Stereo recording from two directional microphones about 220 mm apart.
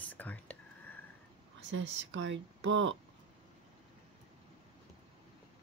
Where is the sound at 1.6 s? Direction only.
55° right (ahead or behind).